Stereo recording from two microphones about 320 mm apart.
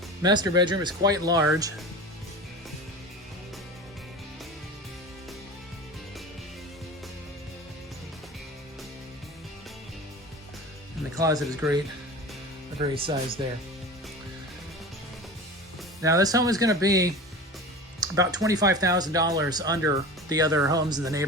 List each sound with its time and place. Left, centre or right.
0.2 s speech: centre
11.1 s speech: centre
12.8 s speech: centre
16.0 s speech: centre